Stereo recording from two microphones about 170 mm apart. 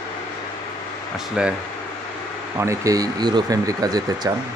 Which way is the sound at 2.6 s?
20° right (ahead or behind).